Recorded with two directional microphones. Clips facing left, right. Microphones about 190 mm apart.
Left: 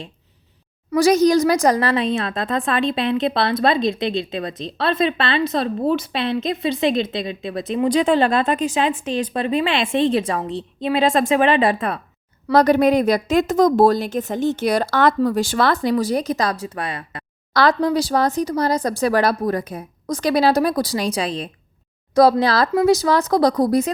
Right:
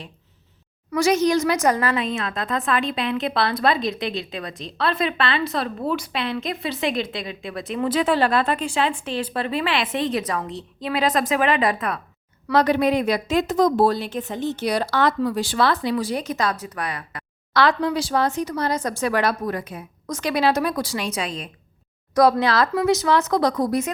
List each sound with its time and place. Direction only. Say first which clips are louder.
0.9 s speech: left 4 dB; 35° left (ahead or behind)
12.5 s a woman's voice: left 4 dB; 40° left (ahead or behind)
17.5 s speech: left 3 dB; 40° left (ahead or behind)